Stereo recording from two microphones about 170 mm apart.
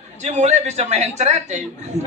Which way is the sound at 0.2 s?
45° right (ahead or behind).